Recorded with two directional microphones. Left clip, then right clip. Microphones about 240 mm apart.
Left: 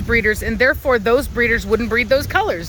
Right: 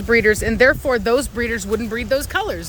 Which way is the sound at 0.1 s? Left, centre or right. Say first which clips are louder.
Right 2 dB; centre.